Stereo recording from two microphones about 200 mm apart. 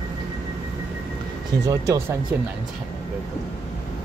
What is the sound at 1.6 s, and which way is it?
Speech, 15° right (ahead or behind).